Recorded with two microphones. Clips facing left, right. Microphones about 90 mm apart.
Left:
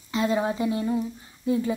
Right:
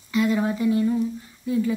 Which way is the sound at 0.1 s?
30° left (ahead or behind).